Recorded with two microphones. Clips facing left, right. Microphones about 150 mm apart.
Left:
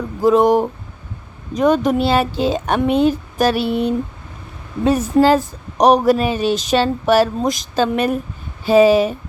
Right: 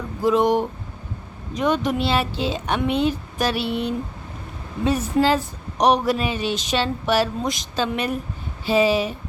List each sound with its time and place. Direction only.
0.2 s speech: 40° left (ahead or behind)